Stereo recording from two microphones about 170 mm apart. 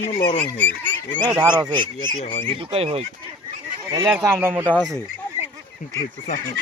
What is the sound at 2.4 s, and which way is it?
Speech, 35° right (ahead or behind).